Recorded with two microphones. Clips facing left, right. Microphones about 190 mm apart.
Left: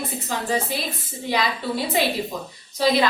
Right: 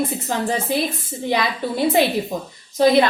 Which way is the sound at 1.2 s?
50° right (ahead or behind).